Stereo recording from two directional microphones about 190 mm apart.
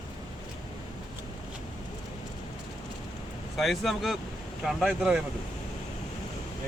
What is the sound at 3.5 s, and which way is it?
Speech, centre (ahead or behind).